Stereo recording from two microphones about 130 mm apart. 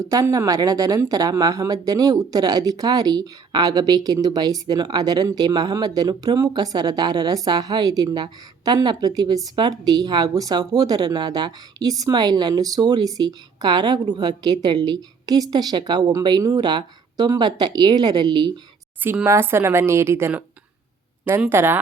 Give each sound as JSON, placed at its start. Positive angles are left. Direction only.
{"t": 0.0, "sound": "speech", "side_deg": -25}
{"t": 18.9, "sound": "speech", "side_deg": -15}
{"t": 21.5, "sound": "speech", "side_deg": -15}